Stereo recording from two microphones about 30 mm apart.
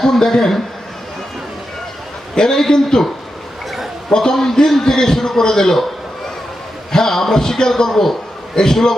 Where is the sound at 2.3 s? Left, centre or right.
Centre.